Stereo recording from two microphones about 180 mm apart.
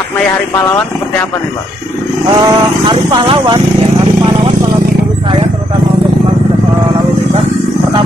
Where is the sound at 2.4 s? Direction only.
25° right (ahead or behind).